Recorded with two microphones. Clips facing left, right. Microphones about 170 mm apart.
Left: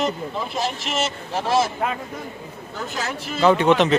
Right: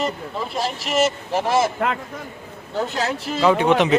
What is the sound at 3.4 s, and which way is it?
Speech, 5° right (ahead or behind).